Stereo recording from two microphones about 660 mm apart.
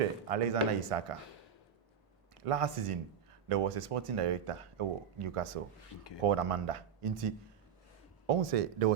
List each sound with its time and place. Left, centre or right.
0.3 s speech: right
2.3 s speech: right
8.3 s speech: right